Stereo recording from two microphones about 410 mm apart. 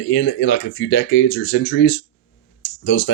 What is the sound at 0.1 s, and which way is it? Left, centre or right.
Speech, left.